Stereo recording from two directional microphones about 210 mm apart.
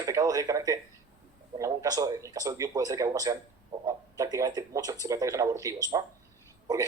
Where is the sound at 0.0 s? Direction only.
15° right (ahead or behind).